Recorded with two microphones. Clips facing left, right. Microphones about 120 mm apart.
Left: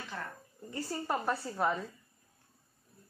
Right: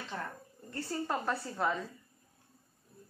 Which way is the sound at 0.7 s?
5° left (ahead or behind).